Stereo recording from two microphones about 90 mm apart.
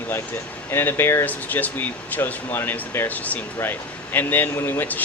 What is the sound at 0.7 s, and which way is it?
Speech, 25° left (ahead or behind).